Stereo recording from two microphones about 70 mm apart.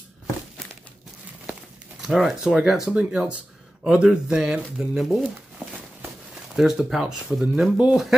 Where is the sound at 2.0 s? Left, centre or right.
Centre.